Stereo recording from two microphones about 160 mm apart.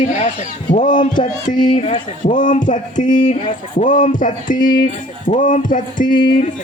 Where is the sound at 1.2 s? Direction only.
30° left (ahead or behind).